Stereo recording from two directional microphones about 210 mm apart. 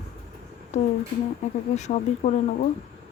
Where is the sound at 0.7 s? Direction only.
35° left (ahead or behind).